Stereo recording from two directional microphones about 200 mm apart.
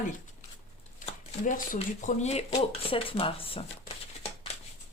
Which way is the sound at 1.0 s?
40° left (ahead or behind).